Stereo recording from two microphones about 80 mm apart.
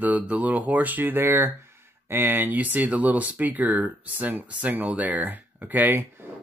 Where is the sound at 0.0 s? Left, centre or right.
Centre.